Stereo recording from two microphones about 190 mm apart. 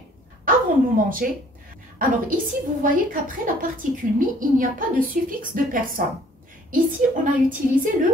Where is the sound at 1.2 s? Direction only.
50° right (ahead or behind).